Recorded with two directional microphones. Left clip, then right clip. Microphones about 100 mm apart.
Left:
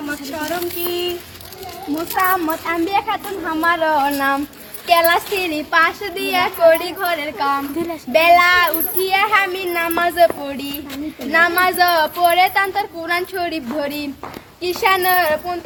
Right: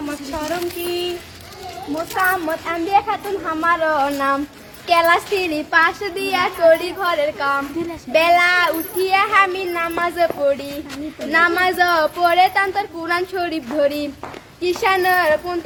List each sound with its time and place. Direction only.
0.3 s a sound: 20° right (ahead or behind)
2.2 s a woman's voice: 20° right (ahead or behind)
2.6 s a woman's voice: 30° right (ahead or behind)
9.6 s speech: centre (ahead or behind)
10.2 s a woman's voice: 25° right (ahead or behind)
14.6 s a woman's voice: 15° right (ahead or behind)